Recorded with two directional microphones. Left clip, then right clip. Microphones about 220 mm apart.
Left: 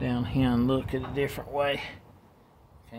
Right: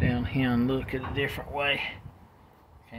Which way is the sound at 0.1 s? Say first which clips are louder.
Even; 5° right (ahead or behind).